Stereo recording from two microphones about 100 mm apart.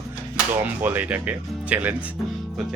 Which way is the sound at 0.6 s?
15° right (ahead or behind).